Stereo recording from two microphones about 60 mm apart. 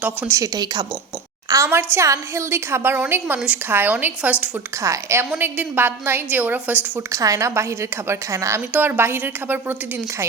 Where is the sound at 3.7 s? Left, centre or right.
Right.